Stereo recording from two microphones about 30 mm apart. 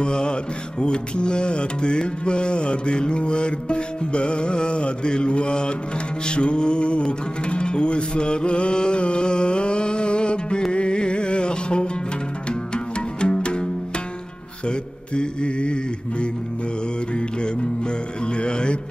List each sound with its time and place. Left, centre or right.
0.0 s music: left
14.7 s mantra: left
17.1 s music: left